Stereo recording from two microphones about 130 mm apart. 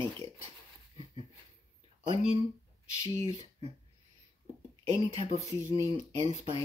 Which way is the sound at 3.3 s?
55° right (ahead or behind).